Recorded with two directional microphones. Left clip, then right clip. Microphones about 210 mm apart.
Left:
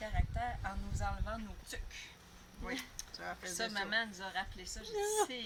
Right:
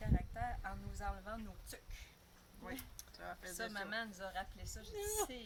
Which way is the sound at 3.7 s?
20° right (ahead or behind).